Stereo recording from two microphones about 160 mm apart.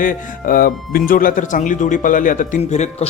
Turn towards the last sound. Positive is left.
turn(degrees=45)  # may be behind; listen again after turning